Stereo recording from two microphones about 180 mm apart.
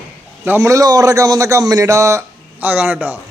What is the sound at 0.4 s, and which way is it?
A man's voice, 15° right (ahead or behind).